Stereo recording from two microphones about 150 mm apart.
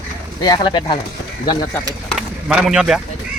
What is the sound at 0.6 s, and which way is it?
Speech, 35° left (ahead or behind).